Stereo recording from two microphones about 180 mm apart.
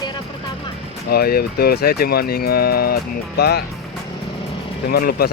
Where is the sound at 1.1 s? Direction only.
60° left (ahead or behind).